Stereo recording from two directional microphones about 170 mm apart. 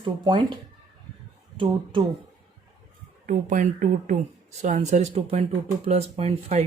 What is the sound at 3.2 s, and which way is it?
Speech, 50° right (ahead or behind).